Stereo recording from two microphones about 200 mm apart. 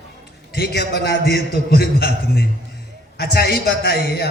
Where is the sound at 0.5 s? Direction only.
55° left (ahead or behind).